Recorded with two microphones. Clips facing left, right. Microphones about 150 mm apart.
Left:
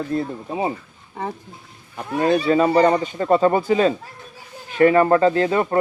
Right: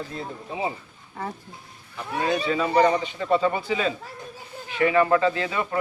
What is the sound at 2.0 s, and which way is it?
Speech, 50° left (ahead or behind).